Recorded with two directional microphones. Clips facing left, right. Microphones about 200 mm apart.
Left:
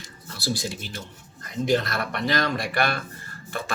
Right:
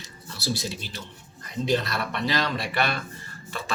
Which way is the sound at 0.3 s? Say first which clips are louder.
Left 1 dB; 50° left (ahead or behind).